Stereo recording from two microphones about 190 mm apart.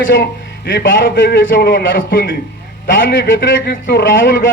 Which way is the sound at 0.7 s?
60° left (ahead or behind).